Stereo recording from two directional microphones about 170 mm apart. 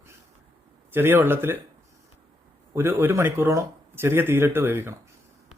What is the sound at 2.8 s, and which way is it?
Speech, 15° right (ahead or behind).